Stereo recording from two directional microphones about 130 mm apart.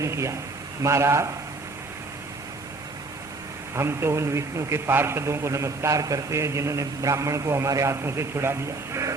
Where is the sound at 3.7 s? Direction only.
20° right (ahead or behind).